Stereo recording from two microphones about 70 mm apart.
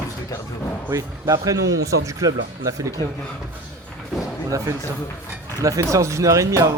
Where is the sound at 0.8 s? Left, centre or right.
Right.